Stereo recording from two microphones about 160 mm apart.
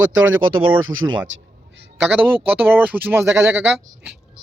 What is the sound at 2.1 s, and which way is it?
Speech, 10° right (ahead or behind).